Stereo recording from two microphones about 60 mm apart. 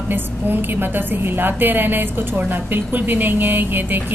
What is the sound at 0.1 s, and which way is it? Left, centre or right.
A woman's voice, right.